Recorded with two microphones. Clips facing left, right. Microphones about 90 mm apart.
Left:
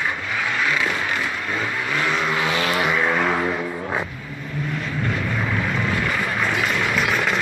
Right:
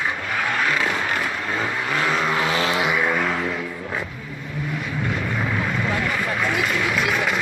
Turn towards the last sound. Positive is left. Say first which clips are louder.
# left 1 dB
turn(degrees=0)  # may be behind; listen again after turning